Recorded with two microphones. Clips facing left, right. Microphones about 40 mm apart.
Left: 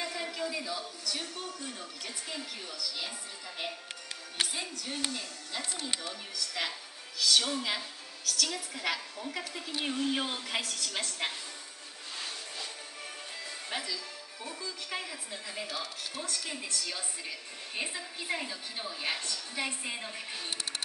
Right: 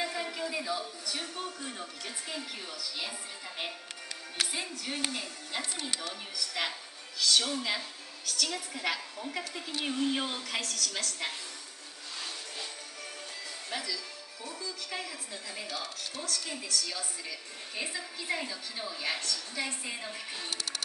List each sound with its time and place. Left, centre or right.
0.0 s a man's voice: centre
4.5 s music: centre
6.3 s music: centre
7.2 s a woman's voice: centre
10.8 s a woman's voice: left
13.7 s a woman's voice: centre